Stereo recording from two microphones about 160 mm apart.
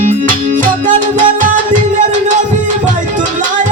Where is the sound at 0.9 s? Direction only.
55° right (ahead or behind).